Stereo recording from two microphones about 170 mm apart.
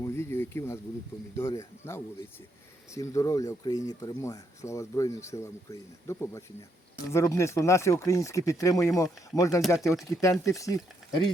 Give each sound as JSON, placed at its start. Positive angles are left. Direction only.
{"t": 0.0, "sound": "speech", "side_deg": 15}
{"t": 9.6, "sound": "speech", "side_deg": 0}
{"t": 9.8, "sound": "speech", "side_deg": 20}